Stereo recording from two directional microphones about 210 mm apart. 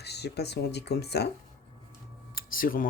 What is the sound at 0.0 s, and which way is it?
Speech, 50° left (ahead or behind).